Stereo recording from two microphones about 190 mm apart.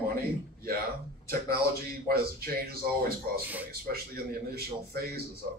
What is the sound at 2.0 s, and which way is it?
A man's voice, 55° right (ahead or behind).